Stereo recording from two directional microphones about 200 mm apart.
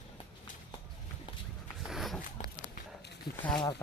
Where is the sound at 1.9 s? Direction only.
Centre (ahead or behind).